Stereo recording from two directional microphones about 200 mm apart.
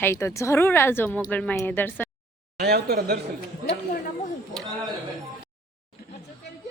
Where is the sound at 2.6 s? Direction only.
55° right (ahead or behind).